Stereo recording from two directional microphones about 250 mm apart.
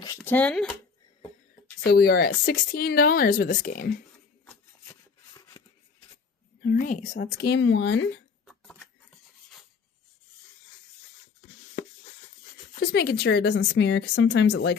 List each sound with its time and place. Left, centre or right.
0.2 s speech: centre
1.8 s speech: left
4.4 s a sound: centre
6.6 s speech: left
8.4 s a sound: centre
12.8 s speech: left